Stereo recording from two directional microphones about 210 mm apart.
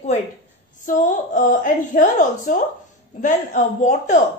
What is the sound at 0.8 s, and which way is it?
A woman's voice, 35° left (ahead or behind).